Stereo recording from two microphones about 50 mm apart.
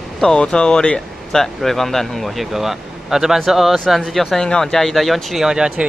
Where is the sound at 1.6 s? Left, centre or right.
Centre.